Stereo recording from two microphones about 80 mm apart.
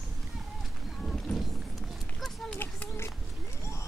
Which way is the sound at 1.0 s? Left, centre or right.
Centre.